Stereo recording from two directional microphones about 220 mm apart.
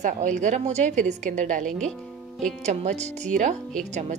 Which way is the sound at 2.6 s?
30° right (ahead or behind).